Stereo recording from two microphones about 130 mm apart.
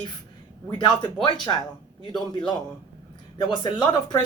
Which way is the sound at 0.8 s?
35° left (ahead or behind).